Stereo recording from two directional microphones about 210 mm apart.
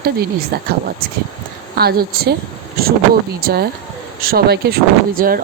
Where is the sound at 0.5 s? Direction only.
50° right (ahead or behind).